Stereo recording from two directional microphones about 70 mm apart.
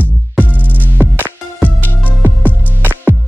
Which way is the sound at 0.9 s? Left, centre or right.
Right.